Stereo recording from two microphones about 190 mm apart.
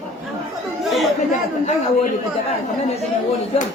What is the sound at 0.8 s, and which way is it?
Speech, centre (ahead or behind).